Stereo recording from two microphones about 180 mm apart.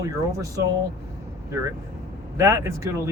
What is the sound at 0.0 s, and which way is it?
Speech, 15° right (ahead or behind).